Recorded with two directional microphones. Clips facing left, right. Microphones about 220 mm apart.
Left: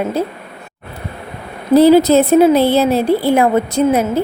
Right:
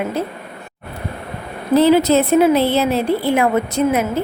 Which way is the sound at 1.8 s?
35° left (ahead or behind).